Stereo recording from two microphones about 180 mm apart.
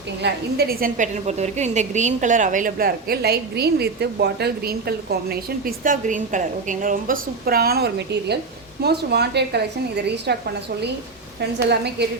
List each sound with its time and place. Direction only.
0.2 s a woman's voice: 65° right (ahead or behind)
11.3 s a woman's voice: 65° right (ahead or behind)